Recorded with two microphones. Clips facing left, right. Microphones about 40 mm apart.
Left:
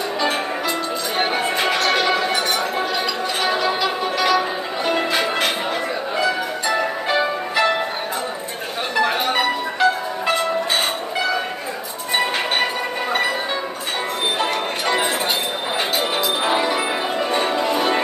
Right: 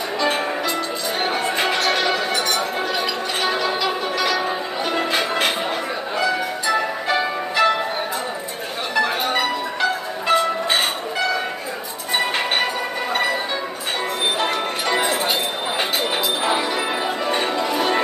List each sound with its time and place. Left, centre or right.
1.2 s music: centre
1.6 s music: centre
1.9 s music: centre
6.7 s music: centre
8.9 s music: centre
14.9 s music: centre
17.3 s change ringing: centre
17.6 s music: centre